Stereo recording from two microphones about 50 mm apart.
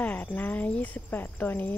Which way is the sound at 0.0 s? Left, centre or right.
Left.